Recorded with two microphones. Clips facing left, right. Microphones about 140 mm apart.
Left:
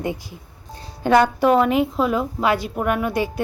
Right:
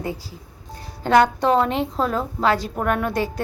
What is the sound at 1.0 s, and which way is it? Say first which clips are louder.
Speech: left 1 dB; 10° left (ahead or behind).